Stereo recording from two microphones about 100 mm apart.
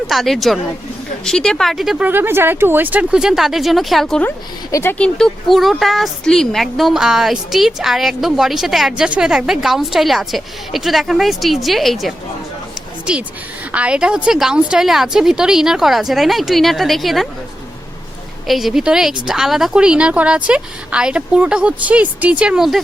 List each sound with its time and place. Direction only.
0.1 s a woman's voice: centre (ahead or behind)
2.0 s speech: 20° right (ahead or behind); by 4.2 s centre (ahead or behind)
4.7 s speech: 25° left (ahead or behind)
4.9 s a woman's voice: 10° left (ahead or behind)
13.7 s a woman's voice: 10° right (ahead or behind)
18.4 s a woman's voice: centre (ahead or behind)